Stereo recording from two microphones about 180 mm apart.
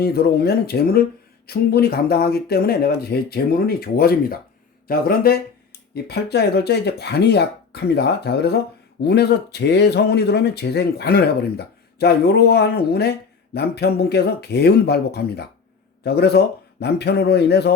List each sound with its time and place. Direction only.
0.0 s speech: 60° left (ahead or behind)